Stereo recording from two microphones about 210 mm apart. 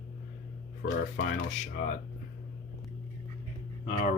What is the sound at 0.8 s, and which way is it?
Speech, 60° left (ahead or behind).